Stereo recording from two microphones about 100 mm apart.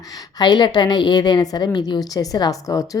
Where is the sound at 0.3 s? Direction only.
45° left (ahead or behind).